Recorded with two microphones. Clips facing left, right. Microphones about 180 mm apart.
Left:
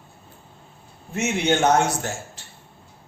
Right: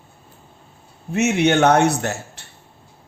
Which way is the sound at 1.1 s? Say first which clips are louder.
Right 5 dB; 65° right (ahead or behind).